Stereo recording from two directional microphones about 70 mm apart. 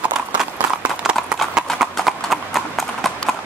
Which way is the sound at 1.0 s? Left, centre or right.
Centre.